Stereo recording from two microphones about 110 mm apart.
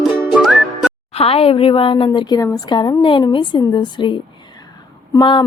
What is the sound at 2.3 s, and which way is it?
Speech, 35° left (ahead or behind).